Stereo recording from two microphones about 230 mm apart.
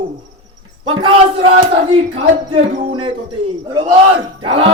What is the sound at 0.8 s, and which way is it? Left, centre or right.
Speech, right.